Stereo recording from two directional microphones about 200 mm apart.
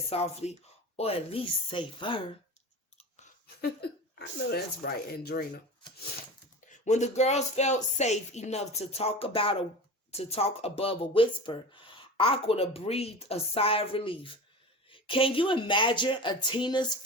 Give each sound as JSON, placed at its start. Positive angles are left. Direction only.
{"t": 0.1, "sound": "speech", "side_deg": 30}
{"t": 3.4, "sound": "speech", "side_deg": 55}
{"t": 6.7, "sound": "speech", "side_deg": 35}